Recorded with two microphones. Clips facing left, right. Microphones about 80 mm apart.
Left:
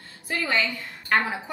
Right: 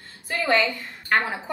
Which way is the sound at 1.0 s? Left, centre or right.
Centre.